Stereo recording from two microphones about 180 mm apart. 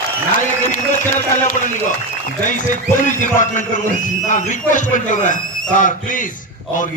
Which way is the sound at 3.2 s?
45° left (ahead or behind).